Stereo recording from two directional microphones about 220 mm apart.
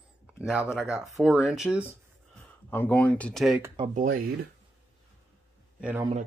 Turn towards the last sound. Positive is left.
turn(degrees=-10)  # may be behind; listen again after turning